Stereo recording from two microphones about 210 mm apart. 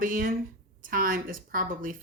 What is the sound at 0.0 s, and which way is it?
Speech, 40° right (ahead or behind).